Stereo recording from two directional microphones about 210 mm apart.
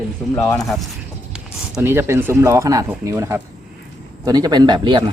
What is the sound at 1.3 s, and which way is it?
Speech, 5° right (ahead or behind).